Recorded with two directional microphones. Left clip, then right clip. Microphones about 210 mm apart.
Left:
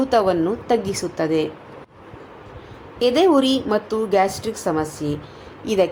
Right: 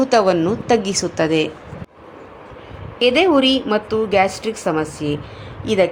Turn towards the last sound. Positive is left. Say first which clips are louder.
# right 2 dB
turn(degrees=-10)  # may be behind; listen again after turning